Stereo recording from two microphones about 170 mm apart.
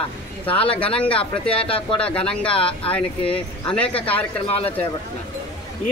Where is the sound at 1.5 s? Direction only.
35° left (ahead or behind).